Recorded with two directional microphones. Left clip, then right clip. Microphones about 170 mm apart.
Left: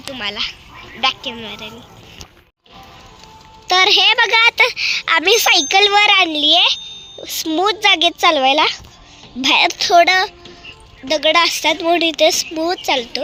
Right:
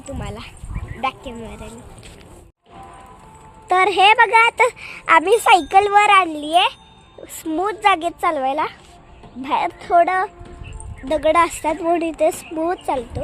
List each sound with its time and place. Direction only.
0.1 s speech: centre (ahead or behind)
3.7 s a woman's voice: 10° right (ahead or behind); by 10.1 s 15° left (ahead or behind)
10.1 s a woman's voice: 5° left (ahead or behind)